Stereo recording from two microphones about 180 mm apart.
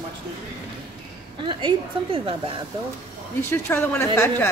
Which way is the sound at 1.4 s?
30° right (ahead or behind).